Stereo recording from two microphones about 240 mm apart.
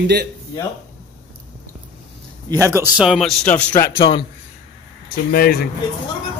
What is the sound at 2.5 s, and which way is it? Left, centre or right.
A man's voice, centre.